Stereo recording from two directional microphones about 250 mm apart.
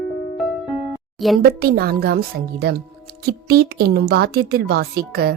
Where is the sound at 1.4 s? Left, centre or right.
Right.